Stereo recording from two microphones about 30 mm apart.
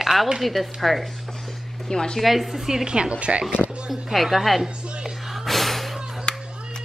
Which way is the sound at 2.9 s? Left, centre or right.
Right.